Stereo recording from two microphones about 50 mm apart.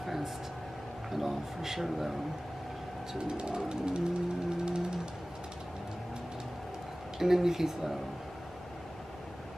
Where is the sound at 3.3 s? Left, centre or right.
Centre.